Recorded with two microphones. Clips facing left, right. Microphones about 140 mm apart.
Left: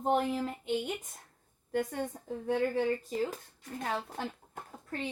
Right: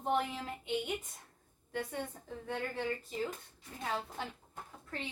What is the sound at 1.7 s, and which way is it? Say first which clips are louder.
A woman's voice: left 6 dB; 45° left (ahead or behind).